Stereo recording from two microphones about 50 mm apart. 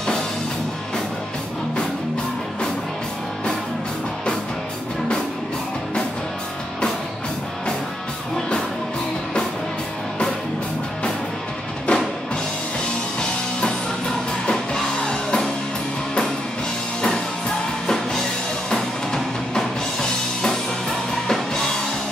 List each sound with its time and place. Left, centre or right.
11.9 s music: left
13.2 s music: centre
17.8 s music: centre